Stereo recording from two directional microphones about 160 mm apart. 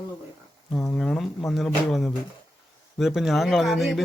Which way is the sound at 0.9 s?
5° left (ahead or behind).